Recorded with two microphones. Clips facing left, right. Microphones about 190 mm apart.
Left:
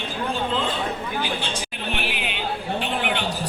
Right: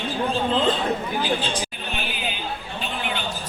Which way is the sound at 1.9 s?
70° left (ahead or behind).